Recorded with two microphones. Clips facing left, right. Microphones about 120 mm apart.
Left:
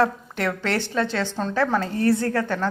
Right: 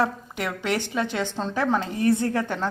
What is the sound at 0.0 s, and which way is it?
A woman's voice, 10° right (ahead or behind).